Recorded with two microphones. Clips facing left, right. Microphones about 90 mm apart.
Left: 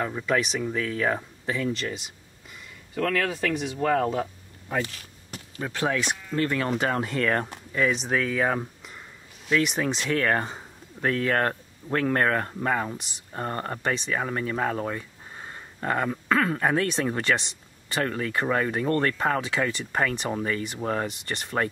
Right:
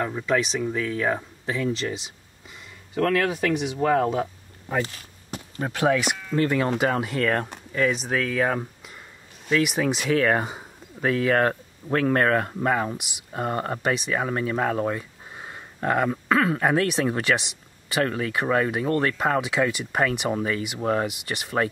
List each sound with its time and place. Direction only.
0.0 s speech: centre (ahead or behind)
2.9 s speech: 15° right (ahead or behind)
4.1 s a sound: 10° right (ahead or behind)
4.8 s walk: 35° right (ahead or behind)
5.7 s speech: 10° right (ahead or behind)
6.0 s speech: 70° right (ahead or behind)
6.3 s speech: 15° right (ahead or behind)